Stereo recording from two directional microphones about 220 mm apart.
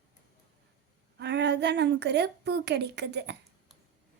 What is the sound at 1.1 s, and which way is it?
A woman's voice, 50° right (ahead or behind).